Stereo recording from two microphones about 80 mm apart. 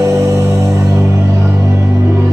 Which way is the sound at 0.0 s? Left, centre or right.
Right.